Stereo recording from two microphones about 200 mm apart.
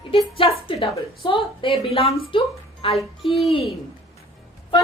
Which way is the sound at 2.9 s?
Centre (ahead or behind).